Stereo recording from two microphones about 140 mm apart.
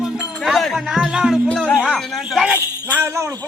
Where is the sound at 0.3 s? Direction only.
Centre (ahead or behind).